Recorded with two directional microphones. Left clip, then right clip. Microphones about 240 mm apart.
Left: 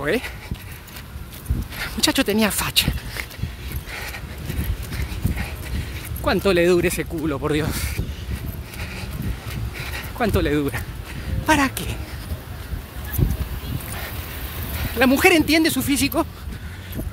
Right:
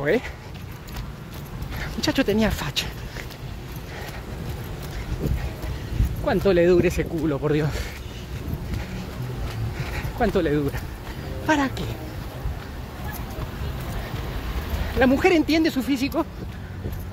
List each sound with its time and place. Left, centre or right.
0.0 s speech: left
1.8 s speech: left
6.2 s speech: left
9.9 s speech: left
15.0 s speech: left